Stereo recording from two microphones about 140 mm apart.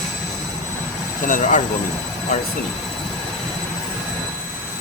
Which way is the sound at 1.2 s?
70° left (ahead or behind).